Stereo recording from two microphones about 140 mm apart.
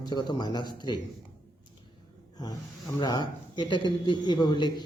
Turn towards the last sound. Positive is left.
turn(degrees=30)  # may be behind; listen again after turning